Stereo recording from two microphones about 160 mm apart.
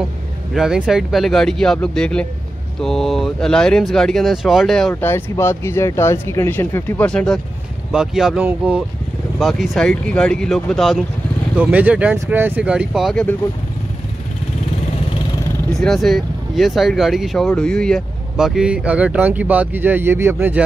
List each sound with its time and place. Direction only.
0.6 s speech: 5° right (ahead or behind)
5.0 s speech: 15° left (ahead or behind)
15.7 s speech: centre (ahead or behind)